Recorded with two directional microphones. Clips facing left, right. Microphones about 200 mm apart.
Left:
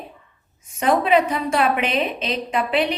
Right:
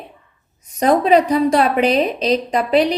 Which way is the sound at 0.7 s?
40° right (ahead or behind).